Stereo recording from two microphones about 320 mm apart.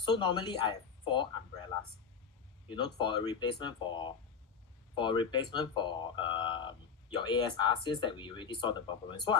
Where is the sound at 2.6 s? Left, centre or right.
Centre.